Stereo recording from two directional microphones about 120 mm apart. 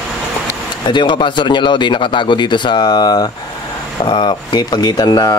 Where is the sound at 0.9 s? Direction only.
40° left (ahead or behind).